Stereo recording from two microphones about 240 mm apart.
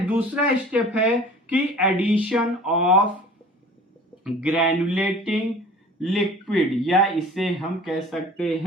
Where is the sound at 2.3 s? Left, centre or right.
Centre.